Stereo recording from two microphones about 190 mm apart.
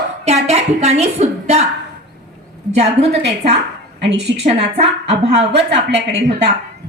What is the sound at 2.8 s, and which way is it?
Speech, 35° right (ahead or behind).